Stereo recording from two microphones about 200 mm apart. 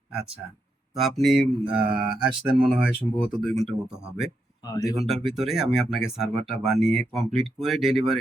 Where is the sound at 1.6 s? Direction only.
25° right (ahead or behind).